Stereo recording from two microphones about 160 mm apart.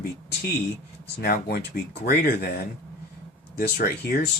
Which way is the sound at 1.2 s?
70° left (ahead or behind).